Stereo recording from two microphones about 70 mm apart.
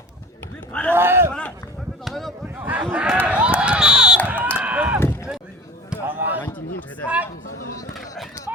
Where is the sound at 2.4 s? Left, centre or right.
Right.